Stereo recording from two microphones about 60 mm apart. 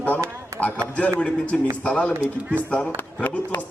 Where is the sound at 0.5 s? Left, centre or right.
Right.